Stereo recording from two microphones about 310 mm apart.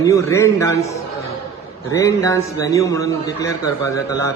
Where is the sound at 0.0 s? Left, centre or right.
Centre.